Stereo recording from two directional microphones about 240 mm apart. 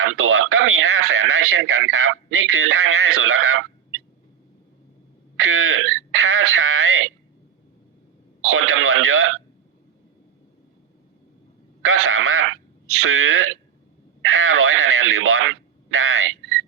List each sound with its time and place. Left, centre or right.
0.0 s speech: right
5.4 s speech: right
8.4 s speech: right
11.8 s speech: right